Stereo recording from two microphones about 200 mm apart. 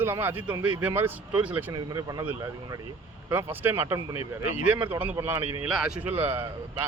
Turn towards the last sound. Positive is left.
turn(degrees=-10)  # may be behind; listen again after turning